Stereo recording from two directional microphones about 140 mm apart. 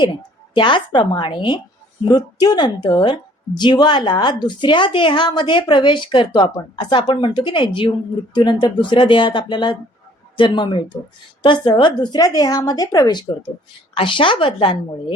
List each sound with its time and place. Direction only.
0.0 s a woman's voice: 35° left (ahead or behind)